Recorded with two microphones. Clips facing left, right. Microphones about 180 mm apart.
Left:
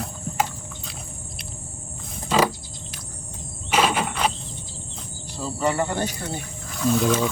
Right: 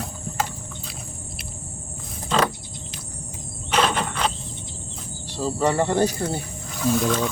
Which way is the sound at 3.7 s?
10° left (ahead or behind).